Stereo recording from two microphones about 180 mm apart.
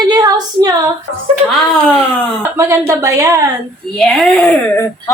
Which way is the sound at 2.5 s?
15° right (ahead or behind).